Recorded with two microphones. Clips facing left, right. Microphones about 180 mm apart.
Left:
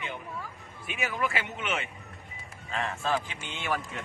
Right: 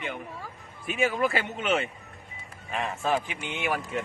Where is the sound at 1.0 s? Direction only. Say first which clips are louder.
Right 6 dB; 30° right (ahead or behind).